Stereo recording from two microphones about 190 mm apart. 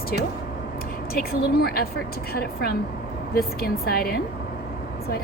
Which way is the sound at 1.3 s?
55° left (ahead or behind).